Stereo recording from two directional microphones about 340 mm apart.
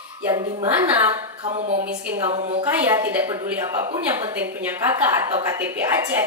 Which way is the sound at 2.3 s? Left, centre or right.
Centre.